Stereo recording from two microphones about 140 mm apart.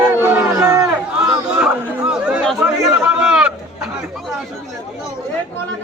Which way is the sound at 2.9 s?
10° right (ahead or behind).